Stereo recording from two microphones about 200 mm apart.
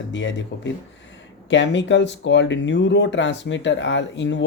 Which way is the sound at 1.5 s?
65° left (ahead or behind).